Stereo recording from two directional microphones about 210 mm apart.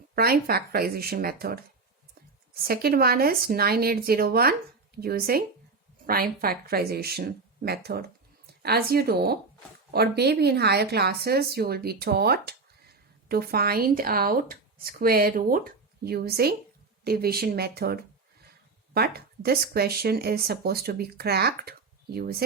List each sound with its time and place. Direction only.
0.2 s speech: 45° right (ahead or behind)
2.6 s speech: 45° right (ahead or behind)